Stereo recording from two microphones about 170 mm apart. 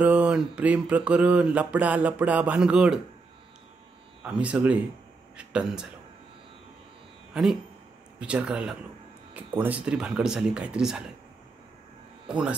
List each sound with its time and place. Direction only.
0.0 s mantra: 10° right (ahead or behind)
4.2 s mantra: 5° right (ahead or behind)
7.3 s speech: 5° right (ahead or behind)
8.2 s mantra: 5° right (ahead or behind)
9.6 s speech: 10° right (ahead or behind)
12.3 s speech: 5° right (ahead or behind)